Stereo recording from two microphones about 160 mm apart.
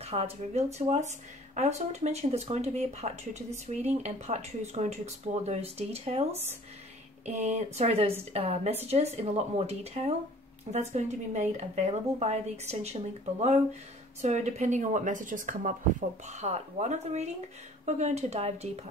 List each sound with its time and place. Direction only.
0.0 s a woman's voice: 40° right (ahead or behind)
16.3 s speech: 45° right (ahead or behind)